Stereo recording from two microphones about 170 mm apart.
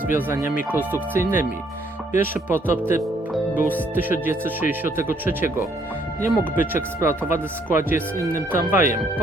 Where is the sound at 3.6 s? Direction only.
10° right (ahead or behind).